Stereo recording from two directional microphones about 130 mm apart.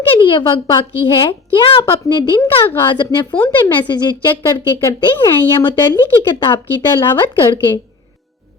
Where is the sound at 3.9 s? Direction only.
35° left (ahead or behind).